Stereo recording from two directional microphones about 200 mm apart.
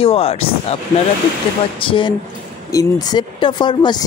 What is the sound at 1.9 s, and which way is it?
Speech, 25° left (ahead or behind).